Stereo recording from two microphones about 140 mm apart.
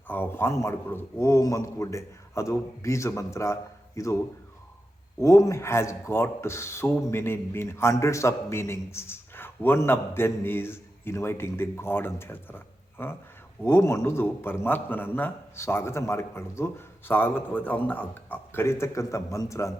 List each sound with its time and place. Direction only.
0.1 s a man's voice: 15° left (ahead or behind)
5.2 s a man's voice: 20° left (ahead or behind)